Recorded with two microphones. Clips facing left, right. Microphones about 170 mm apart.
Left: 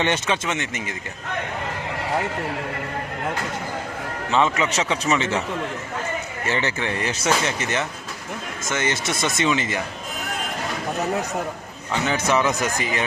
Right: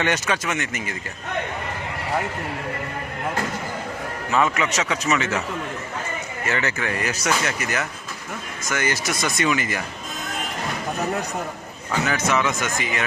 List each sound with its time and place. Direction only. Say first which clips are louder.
0.0 s speech: left 1 dB; 25° left (ahead or behind)
4.3 s speech: left 1 dB; 25° left (ahead or behind)
6.5 s speech: left 1 dB; 30° left (ahead or behind)
12.0 s speech: left 2 dB; 30° left (ahead or behind)